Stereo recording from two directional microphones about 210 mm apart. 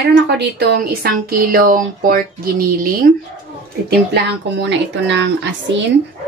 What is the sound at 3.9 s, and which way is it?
Speech, 55° right (ahead or behind).